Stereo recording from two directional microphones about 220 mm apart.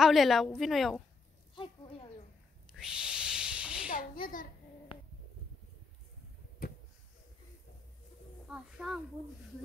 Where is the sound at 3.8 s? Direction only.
40° left (ahead or behind).